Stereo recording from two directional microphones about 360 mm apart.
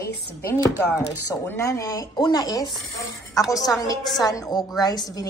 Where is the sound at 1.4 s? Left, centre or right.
Centre.